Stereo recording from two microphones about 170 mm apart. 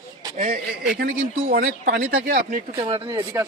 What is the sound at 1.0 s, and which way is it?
Speech, 65° right (ahead or behind).